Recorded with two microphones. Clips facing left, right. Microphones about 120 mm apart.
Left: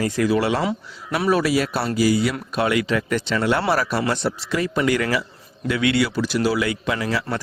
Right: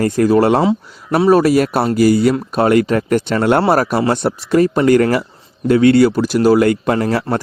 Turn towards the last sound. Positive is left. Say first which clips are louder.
# right 8 dB
turn(degrees=-50)  # may be behind; listen again after turning